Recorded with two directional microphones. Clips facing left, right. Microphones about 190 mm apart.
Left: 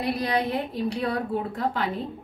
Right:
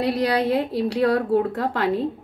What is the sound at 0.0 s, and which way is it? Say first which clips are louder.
A woman's voice: right 5 dB; 90° right.